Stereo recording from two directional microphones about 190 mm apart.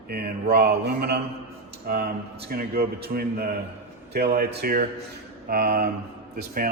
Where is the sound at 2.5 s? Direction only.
50° right (ahead or behind).